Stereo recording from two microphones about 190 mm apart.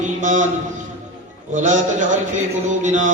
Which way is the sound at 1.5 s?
40° right (ahead or behind).